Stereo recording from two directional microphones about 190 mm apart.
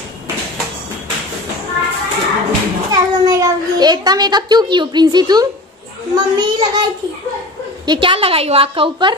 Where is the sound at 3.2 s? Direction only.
20° right (ahead or behind).